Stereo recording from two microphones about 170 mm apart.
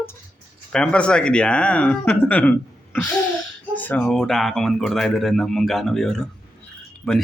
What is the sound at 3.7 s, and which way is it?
Speech, 10° left (ahead or behind).